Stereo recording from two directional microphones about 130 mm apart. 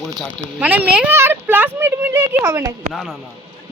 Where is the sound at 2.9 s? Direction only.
5° right (ahead or behind).